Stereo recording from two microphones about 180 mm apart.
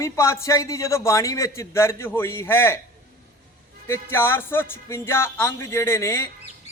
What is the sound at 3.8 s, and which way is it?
A man's voice, 15° left (ahead or behind).